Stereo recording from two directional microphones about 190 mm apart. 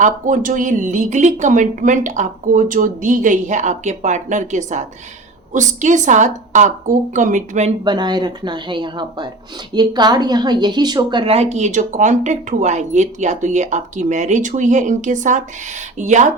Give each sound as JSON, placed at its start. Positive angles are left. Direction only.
{"t": 0.0, "sound": "a woman's voice", "side_deg": -45}
{"t": 7.9, "sound": "a woman's voice", "side_deg": -25}